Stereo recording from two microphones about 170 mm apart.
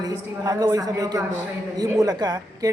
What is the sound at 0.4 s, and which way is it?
A woman's voice, 20° right (ahead or behind).